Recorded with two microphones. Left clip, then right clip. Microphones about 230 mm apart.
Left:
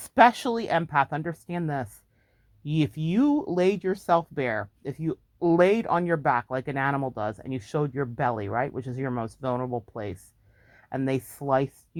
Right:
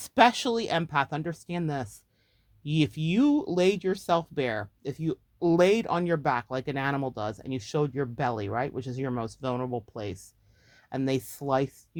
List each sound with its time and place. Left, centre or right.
0.0 s speech: left